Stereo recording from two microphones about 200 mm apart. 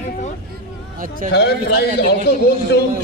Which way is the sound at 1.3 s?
55° left (ahead or behind).